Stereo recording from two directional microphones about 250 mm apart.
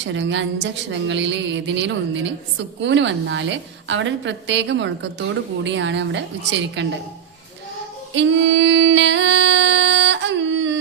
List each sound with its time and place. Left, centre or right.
0.0 s a woman's voice: right
8.1 s music: right